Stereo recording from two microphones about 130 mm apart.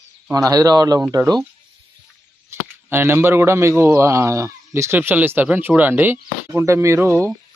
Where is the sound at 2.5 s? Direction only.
20° right (ahead or behind).